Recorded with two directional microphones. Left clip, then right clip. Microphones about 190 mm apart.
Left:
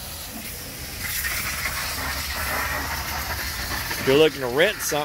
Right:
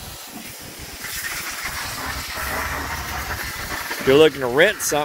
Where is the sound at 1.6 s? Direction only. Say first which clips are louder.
Even; 50° left (ahead or behind).